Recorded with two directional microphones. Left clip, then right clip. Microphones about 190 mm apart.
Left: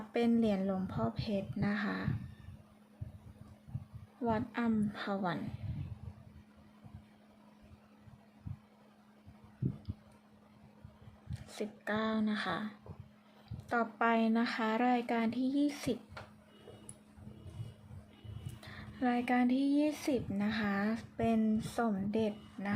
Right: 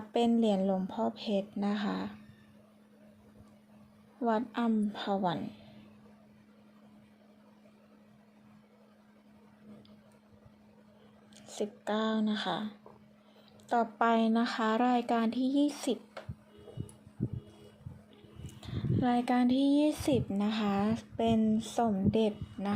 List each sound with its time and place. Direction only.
0.1 s a woman's voice: 15° right (ahead or behind)
4.2 s a woman's voice: 15° right (ahead or behind)
11.3 s a woman's voice: 15° right (ahead or behind)
18.6 s speech: 15° right (ahead or behind)